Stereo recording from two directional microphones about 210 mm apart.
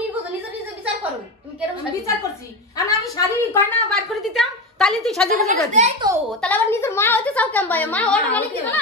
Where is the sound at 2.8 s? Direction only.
15° left (ahead or behind).